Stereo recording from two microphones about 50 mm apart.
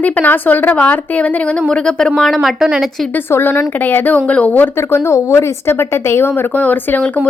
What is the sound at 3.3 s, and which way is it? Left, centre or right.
Speech, left.